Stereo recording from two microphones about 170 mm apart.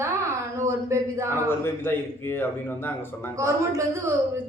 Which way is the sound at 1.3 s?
10° left (ahead or behind).